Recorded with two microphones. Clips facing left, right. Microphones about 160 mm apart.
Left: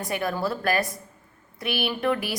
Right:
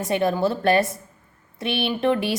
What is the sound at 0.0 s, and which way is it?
A woman's voice, 25° right (ahead or behind).